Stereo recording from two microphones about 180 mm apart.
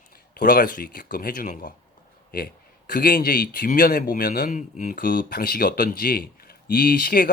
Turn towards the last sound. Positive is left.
turn(degrees=55)  # may be behind; listen again after turning